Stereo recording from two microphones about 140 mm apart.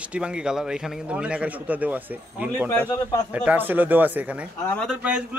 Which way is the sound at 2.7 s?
15° left (ahead or behind).